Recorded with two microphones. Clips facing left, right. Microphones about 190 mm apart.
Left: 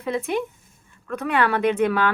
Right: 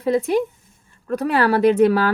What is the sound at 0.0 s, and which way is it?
Speech, 35° right (ahead or behind).